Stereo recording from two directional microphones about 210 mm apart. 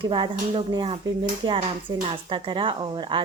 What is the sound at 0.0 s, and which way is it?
A woman's voice, 25° right (ahead or behind).